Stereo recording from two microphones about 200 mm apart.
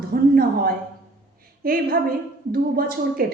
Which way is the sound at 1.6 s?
45° right (ahead or behind).